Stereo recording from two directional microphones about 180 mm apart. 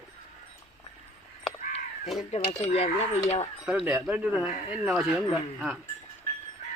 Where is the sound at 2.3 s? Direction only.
35° left (ahead or behind).